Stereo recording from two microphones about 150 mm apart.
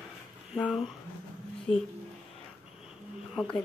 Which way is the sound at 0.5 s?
Centre (ahead or behind).